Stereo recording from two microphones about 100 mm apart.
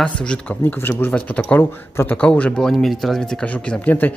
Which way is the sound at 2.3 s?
10° left (ahead or behind).